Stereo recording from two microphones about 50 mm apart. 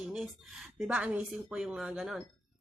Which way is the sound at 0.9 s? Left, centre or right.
Right.